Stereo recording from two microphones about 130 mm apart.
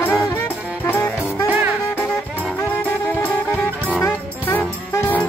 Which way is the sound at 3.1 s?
15° left (ahead or behind).